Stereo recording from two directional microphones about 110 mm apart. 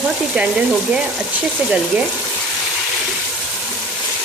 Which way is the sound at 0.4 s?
10° right (ahead or behind).